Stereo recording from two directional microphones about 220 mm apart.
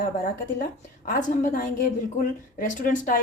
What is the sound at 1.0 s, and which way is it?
Speech, 35° left (ahead or behind).